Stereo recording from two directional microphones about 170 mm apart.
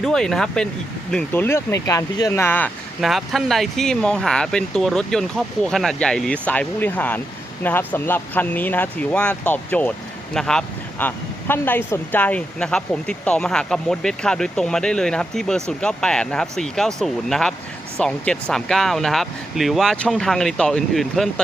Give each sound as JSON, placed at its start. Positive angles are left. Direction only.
{"t": 0.0, "sound": "speech", "side_deg": 5}
{"t": 3.0, "sound": "speech", "side_deg": 0}